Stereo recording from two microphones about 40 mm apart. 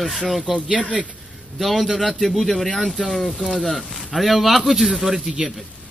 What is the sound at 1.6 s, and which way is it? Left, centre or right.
A man's voice, centre.